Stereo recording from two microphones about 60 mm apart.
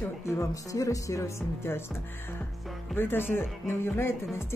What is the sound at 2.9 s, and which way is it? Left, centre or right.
Speech, left.